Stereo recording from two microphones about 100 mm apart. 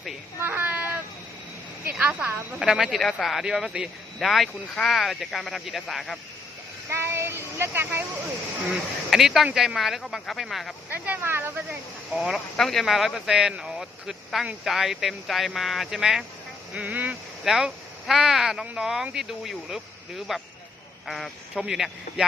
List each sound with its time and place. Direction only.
0.3 s cat: 20° right (ahead or behind)
1.8 s a woman's voice: 15° right (ahead or behind)
6.8 s speech: 25° right (ahead or behind)
8.7 s a woman's voice: 5° right (ahead or behind)
10.8 s speech: 15° right (ahead or behind)
12.1 s a woman's voice: 5° right (ahead or behind)
16.7 s speech: 15° right (ahead or behind)
17.4 s a woman's voice: 5° right (ahead or behind)